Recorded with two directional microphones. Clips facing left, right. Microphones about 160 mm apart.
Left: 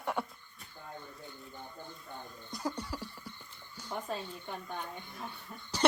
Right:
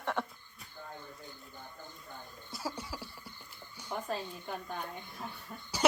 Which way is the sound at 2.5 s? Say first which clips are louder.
Left 3 dB; 5° right (ahead or behind).